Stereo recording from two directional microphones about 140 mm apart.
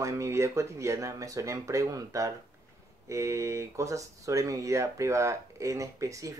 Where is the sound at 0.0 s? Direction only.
20° right (ahead or behind).